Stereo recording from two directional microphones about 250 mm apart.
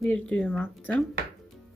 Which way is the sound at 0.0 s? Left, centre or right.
Centre.